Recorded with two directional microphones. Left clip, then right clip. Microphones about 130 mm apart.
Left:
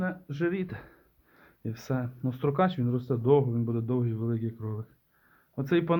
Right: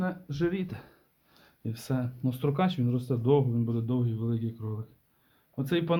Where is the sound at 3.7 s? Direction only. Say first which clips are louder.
Left 1 dB; 25° left (ahead or behind).